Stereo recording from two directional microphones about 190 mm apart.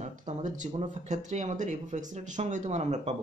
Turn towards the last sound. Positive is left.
turn(degrees=-40)  # may be behind; listen again after turning